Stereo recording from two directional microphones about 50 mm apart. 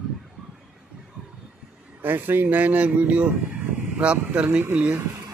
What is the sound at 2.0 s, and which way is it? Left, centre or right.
Speech, right.